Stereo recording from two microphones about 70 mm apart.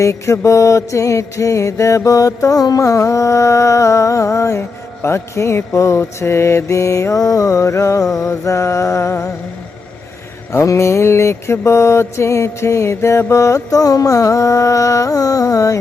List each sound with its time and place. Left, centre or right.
0.0 s mantra: left
10.5 s mantra: left